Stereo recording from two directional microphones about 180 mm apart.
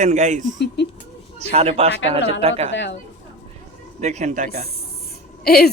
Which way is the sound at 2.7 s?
80° left.